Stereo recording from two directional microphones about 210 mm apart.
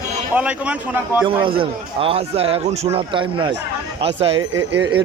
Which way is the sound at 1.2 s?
25° right (ahead or behind).